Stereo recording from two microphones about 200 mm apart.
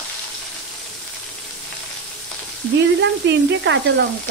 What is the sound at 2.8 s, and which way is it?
A woman's voice, 65° right (ahead or behind).